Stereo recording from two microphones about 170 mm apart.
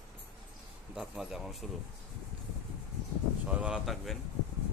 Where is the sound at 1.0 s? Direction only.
5° right (ahead or behind).